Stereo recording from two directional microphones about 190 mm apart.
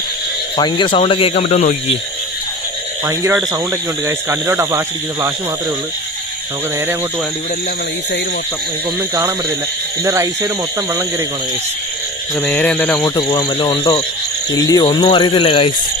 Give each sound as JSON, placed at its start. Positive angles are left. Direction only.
{"t": 0.6, "sound": "speech", "side_deg": 25}
{"t": 3.1, "sound": "speech", "side_deg": -15}
{"t": 10.0, "sound": "speech", "side_deg": -15}
{"t": 12.4, "sound": "speech", "side_deg": 10}
{"t": 13.0, "sound": "speech", "side_deg": 20}